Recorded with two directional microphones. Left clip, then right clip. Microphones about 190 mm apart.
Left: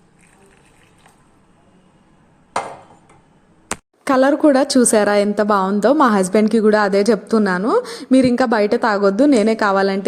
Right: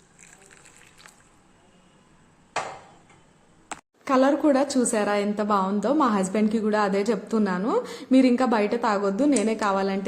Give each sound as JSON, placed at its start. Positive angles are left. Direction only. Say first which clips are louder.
{"t": 4.0, "sound": "a woman's voice", "louder": "left 7 dB", "side_deg": 40}